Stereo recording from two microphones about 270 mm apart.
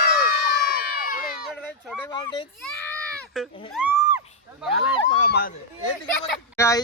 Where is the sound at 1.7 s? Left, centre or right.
Centre.